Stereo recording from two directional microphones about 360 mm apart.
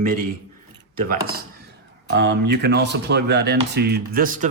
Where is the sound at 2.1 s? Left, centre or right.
Right.